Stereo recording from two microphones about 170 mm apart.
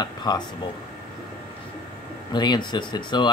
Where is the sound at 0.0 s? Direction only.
25° left (ahead or behind).